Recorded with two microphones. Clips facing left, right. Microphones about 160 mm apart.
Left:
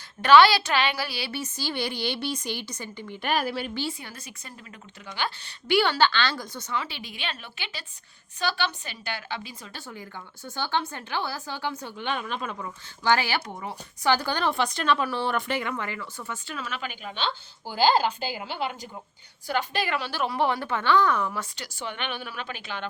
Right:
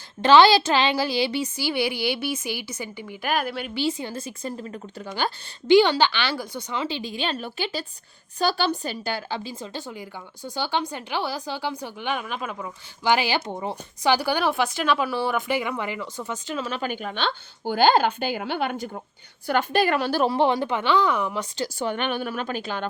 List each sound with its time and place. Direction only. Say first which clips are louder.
0.2 s a woman's voice: right 2 dB; 25° right (ahead or behind); by 3.7 s centre (ahead or behind)
3.8 s a woman's voice: right 7 dB; 20° right (ahead or behind); by 5.3 s 40° right (ahead or behind)
5.6 s a woman's voice: right 6 dB; 20° right (ahead or behind)
6.7 s a woman's voice: right 5 dB; 25° right (ahead or behind)
14.1 s a woman's voice: right 3 dB; 10° right (ahead or behind)
16.8 s a woman's voice: right 5 dB; 50° right (ahead or behind)
20.3 s a woman's voice: right 4 dB; 20° right (ahead or behind)
21.8 s a woman's voice: right 6 dB; 40° right (ahead or behind)